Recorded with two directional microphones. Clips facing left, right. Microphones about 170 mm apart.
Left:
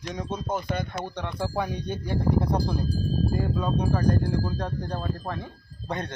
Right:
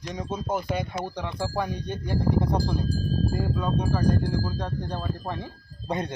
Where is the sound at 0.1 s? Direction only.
5° right (ahead or behind).